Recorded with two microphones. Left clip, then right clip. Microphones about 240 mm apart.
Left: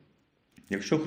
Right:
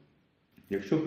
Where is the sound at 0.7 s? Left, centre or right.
Left.